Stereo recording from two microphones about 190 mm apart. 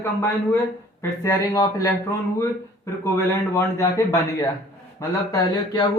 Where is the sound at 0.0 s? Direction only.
15° left (ahead or behind).